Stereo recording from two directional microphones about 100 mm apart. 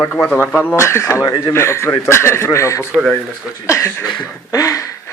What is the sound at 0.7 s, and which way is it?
Speech, 25° left (ahead or behind).